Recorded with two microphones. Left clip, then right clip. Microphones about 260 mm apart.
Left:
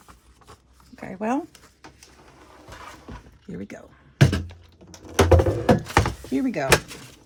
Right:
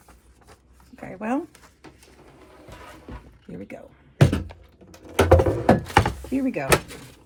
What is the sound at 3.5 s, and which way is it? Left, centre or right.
Speech, left.